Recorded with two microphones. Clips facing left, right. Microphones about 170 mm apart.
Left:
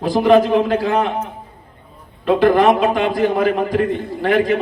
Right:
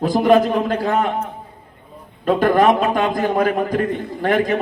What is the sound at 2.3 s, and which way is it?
A man's voice, 45° right (ahead or behind).